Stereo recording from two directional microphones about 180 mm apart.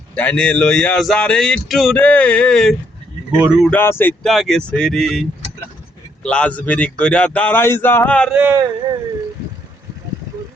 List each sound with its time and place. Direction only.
0.2 s speech: 5° left (ahead or behind)
3.7 s speech: 10° left (ahead or behind)
6.2 s speech: 5° left (ahead or behind)
8.4 s speech: 10° right (ahead or behind)